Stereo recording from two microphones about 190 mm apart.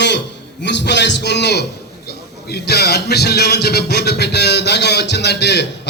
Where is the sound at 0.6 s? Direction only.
65° left (ahead or behind).